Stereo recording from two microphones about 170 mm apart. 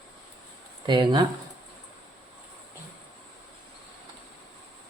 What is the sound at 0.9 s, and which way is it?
Speech, 25° right (ahead or behind).